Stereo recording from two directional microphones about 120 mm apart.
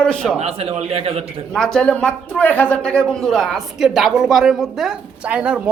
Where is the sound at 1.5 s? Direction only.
5° left (ahead or behind).